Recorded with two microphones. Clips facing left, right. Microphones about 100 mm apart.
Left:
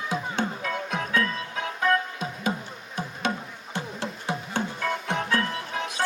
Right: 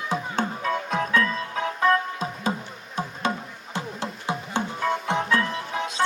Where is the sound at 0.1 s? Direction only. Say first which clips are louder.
Right 2 dB; 40° right (ahead or behind).